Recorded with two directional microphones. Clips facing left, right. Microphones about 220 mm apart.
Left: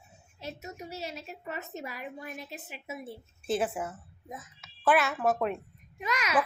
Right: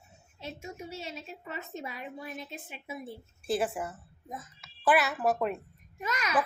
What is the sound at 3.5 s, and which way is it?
A woman's voice, centre (ahead or behind).